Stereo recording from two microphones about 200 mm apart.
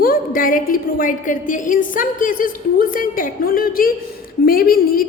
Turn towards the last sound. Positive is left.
turn(degrees=45)  # may be behind; listen again after turning